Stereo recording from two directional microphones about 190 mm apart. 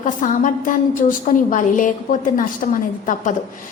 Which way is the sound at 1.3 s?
50° left (ahead or behind).